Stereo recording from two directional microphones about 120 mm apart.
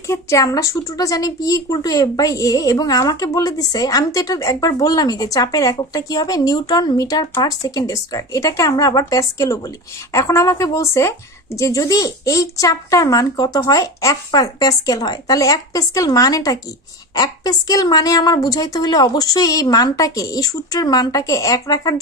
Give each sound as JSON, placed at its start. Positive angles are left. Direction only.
{"t": 0.0, "sound": "a woman's voice", "side_deg": 25}